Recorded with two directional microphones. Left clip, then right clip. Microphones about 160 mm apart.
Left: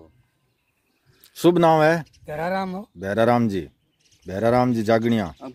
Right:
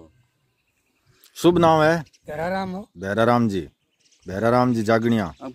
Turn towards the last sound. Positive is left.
turn(degrees=-5)  # may be behind; listen again after turning